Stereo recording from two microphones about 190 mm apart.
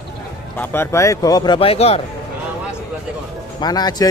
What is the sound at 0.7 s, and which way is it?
Speech, 15° left (ahead or behind).